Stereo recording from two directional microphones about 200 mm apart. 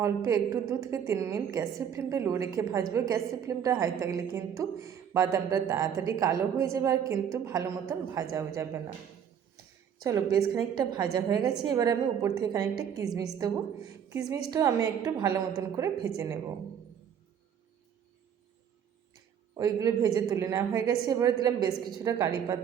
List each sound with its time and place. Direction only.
0.0 s a woman's voice: 15° right (ahead or behind)
10.0 s a woman's voice: 15° right (ahead or behind)
19.5 s a woman's voice: 15° right (ahead or behind)